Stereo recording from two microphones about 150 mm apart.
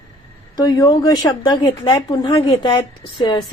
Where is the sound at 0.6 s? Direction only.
25° left (ahead or behind).